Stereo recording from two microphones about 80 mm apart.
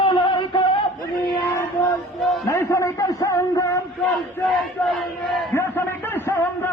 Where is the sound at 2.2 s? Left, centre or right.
Centre.